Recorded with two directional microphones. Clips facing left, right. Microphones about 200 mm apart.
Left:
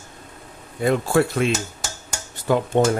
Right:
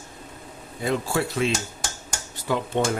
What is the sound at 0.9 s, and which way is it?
Speech, 55° left (ahead or behind).